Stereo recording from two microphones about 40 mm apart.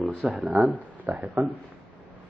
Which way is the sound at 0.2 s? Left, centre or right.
Centre.